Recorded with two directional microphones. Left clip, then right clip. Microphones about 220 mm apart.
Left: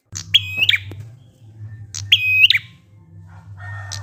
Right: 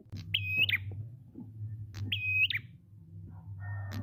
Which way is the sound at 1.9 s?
5° right (ahead or behind).